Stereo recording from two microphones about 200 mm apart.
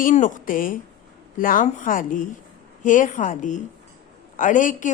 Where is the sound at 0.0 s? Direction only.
40° left (ahead or behind).